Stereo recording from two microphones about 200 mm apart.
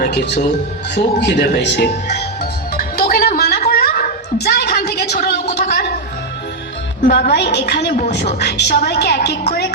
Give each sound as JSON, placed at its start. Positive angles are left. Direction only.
{"t": 0.0, "sound": "speech", "side_deg": 55}
{"t": 0.9, "sound": "music", "side_deg": 55}
{"t": 3.7, "sound": "a sound", "side_deg": 50}
{"t": 5.1, "sound": "a woman's voice", "side_deg": 50}
{"t": 5.5, "sound": "a sound", "side_deg": 55}
{"t": 7.1, "sound": "a woman's voice", "side_deg": 55}